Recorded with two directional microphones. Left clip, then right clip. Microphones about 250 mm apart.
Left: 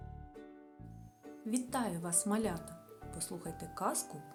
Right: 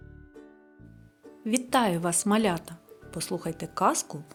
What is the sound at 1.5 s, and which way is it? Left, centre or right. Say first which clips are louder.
A woman's voice: right 13 dB; left.